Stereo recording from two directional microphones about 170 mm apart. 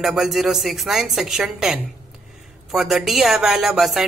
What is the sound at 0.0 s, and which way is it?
Speech, centre (ahead or behind).